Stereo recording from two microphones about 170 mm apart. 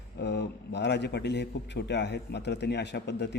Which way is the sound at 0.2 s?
90° left.